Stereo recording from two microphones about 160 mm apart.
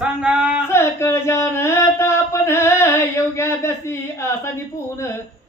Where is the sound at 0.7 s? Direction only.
15° left (ahead or behind).